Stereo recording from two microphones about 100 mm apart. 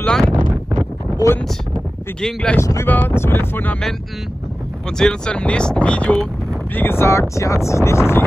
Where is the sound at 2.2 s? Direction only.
10° left (ahead or behind).